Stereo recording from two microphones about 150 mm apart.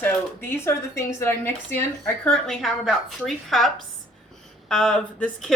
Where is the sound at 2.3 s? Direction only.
Centre (ahead or behind).